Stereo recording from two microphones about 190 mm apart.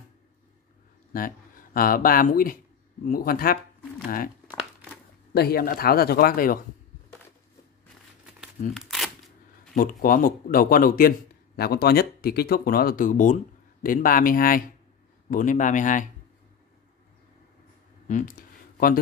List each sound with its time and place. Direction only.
1.1 s speech: 50° left (ahead or behind)
5.3 s a man's voice: 55° left (ahead or behind)
8.4 s crumpling: centre (ahead or behind)
9.8 s a man's voice: 45° left (ahead or behind)
18.0 s speech: 40° left (ahead or behind)